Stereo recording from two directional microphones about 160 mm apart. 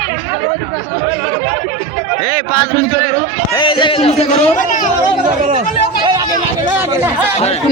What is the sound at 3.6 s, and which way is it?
Speech, 30° left (ahead or behind).